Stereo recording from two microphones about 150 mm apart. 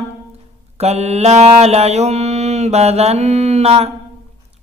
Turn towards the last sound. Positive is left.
turn(degrees=-45)  # may be behind; listen again after turning